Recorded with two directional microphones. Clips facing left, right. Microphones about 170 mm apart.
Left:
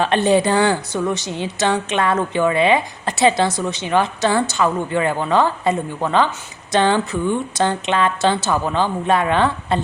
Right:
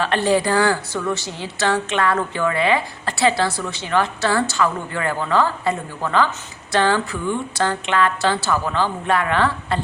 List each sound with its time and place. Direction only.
0.0 s a woman's voice: 20° left (ahead or behind)